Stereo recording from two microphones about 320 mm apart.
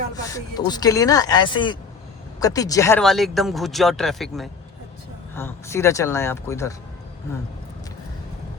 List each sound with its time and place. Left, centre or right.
0.3 s speech: centre